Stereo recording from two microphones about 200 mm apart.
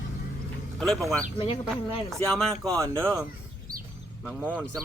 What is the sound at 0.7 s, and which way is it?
Speech, 5° left (ahead or behind).